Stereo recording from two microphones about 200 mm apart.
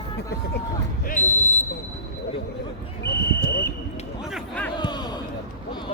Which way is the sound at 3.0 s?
55° left (ahead or behind).